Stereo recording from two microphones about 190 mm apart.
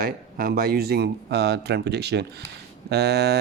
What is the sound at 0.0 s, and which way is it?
Speech, 50° right (ahead or behind).